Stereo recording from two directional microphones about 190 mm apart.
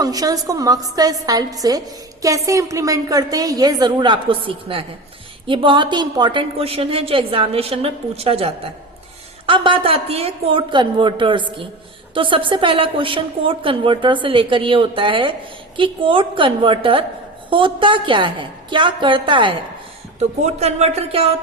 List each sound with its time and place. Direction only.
0.0 s a woman's voice: 20° right (ahead or behind)